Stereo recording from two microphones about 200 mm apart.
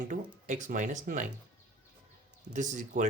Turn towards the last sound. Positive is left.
turn(degrees=-40)  # may be behind; listen again after turning